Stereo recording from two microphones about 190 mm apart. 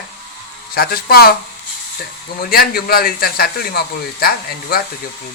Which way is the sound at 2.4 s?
50° left (ahead or behind).